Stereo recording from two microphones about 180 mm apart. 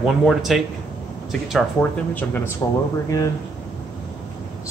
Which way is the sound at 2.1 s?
10° left (ahead or behind).